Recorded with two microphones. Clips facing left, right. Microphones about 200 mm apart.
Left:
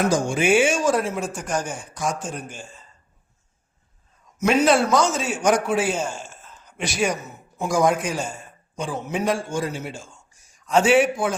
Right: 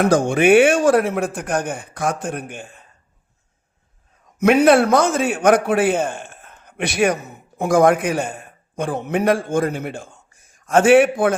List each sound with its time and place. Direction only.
0.0 s speech: 60° right (ahead or behind)
4.4 s a man's voice: 60° right (ahead or behind)